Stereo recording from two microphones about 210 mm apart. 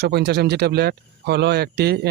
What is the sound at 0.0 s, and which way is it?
Speech, 55° right (ahead or behind).